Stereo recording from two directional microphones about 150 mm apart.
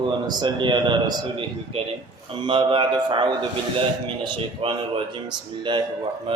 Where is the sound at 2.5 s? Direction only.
30° right (ahead or behind).